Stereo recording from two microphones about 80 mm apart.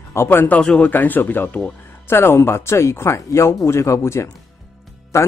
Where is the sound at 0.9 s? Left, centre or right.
Left.